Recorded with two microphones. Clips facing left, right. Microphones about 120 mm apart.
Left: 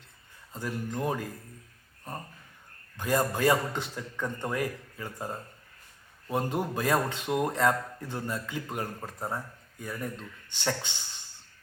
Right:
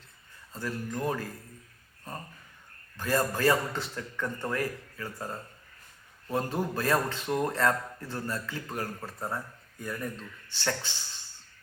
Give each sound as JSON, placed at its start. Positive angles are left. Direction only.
{"t": 0.5, "sound": "a man's voice", "side_deg": 20}
{"t": 3.0, "sound": "a man's voice", "side_deg": 15}
{"t": 10.6, "sound": "speech", "side_deg": 20}